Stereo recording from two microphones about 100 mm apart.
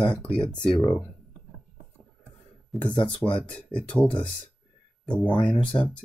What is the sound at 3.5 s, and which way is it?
Speech, 10° left (ahead or behind).